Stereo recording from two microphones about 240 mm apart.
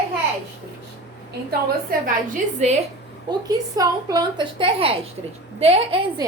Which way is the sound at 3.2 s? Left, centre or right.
Centre.